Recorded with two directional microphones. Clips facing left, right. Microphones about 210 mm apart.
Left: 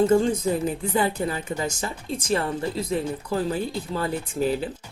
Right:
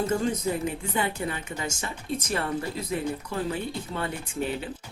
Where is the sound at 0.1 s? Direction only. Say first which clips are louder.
Left 6 dB; 30° left (ahead or behind).